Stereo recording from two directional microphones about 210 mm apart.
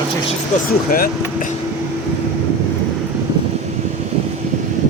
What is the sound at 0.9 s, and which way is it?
Speech, 45° left (ahead or behind).